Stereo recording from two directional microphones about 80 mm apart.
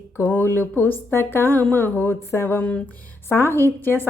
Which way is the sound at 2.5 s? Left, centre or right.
Centre.